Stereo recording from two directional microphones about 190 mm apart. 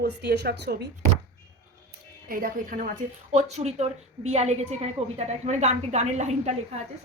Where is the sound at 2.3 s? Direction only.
45° right (ahead or behind).